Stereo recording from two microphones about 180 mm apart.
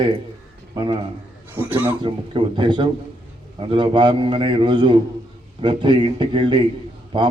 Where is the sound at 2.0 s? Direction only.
25° right (ahead or behind).